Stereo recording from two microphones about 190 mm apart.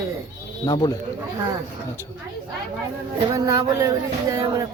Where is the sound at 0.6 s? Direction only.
20° left (ahead or behind).